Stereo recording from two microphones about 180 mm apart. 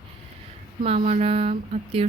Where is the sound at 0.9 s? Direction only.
40° right (ahead or behind).